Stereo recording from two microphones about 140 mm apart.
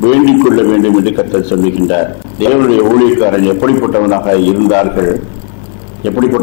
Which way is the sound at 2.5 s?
15° left (ahead or behind).